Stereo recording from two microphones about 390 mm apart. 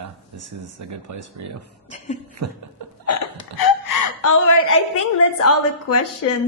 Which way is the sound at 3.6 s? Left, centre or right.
Left.